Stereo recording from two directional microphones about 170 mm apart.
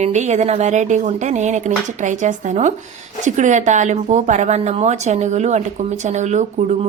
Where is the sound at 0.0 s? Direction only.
45° right (ahead or behind).